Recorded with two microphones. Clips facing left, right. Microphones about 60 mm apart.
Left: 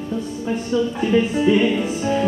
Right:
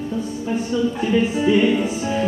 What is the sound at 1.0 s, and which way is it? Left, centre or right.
Music, centre.